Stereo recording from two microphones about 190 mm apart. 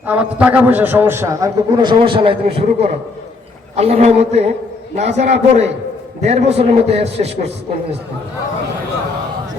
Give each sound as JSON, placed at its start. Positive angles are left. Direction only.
{"t": 0.0, "sound": "a man's voice", "side_deg": -10}